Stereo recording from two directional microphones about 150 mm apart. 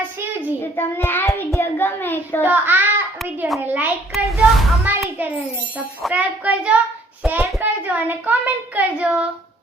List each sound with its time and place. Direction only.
0.0 s child singing: 15° right (ahead or behind)
0.8 s a child's voice: 15° left (ahead or behind)
2.4 s a child's voice: 15° right (ahead or behind)
4.1 s a child's voice: centre (ahead or behind)